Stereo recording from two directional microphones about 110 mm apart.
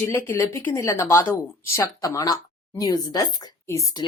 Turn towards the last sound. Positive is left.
turn(degrees=30)  # may be behind; listen again after turning